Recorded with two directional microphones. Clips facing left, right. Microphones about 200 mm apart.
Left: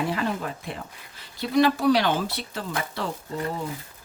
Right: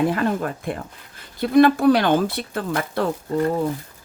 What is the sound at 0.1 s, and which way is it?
Speech, 50° right (ahead or behind).